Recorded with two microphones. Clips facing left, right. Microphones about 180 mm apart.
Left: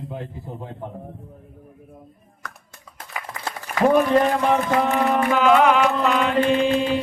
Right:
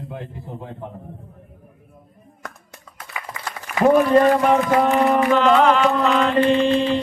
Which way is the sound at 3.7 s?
40° left (ahead or behind).